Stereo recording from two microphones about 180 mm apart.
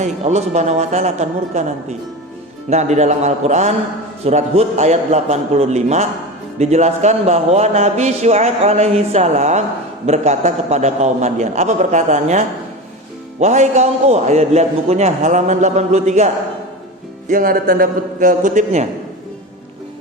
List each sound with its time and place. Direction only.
0.0 s a man's voice: 40° right (ahead or behind)
17.2 s a man's voice: 50° right (ahead or behind)